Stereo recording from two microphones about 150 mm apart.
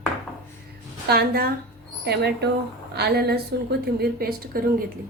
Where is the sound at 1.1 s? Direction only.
90° right.